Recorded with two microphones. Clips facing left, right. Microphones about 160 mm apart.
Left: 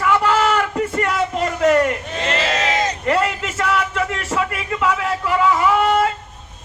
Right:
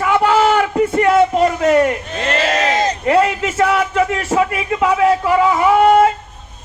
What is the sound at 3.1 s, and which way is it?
A man's voice, 50° right (ahead or behind).